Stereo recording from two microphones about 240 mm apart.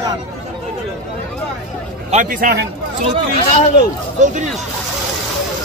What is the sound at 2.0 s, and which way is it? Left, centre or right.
Speech, right.